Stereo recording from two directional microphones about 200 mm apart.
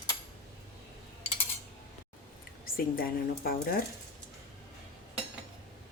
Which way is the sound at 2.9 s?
45° left (ahead or behind).